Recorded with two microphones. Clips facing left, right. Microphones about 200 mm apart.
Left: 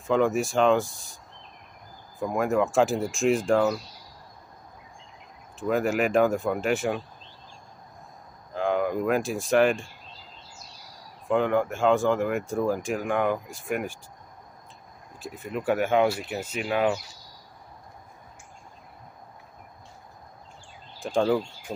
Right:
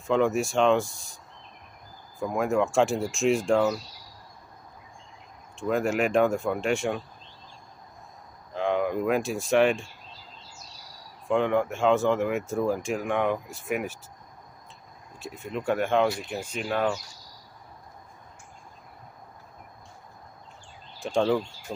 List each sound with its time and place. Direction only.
0.0 s speech: centre (ahead or behind)
2.1 s speech: centre (ahead or behind)
5.6 s speech: centre (ahead or behind)
8.5 s speech: centre (ahead or behind)
11.2 s speech: centre (ahead or behind)
15.1 s speech: centre (ahead or behind)
21.0 s speech: centre (ahead or behind)
21.7 s speech: 20° left (ahead or behind)